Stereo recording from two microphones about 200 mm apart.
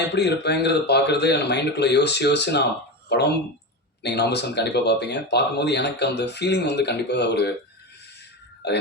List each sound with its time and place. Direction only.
0.1 s speech: 55° left (ahead or behind)
8.6 s burping: 55° left (ahead or behind)